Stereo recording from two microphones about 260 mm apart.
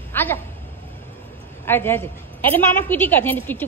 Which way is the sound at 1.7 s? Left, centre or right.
Centre.